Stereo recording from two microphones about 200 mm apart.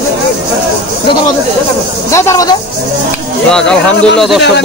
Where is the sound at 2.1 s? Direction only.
15° left (ahead or behind).